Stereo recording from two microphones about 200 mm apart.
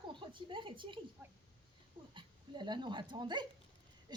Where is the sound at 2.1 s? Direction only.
25° right (ahead or behind).